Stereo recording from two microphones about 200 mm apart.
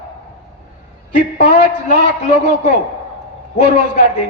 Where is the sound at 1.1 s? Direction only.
35° left (ahead or behind).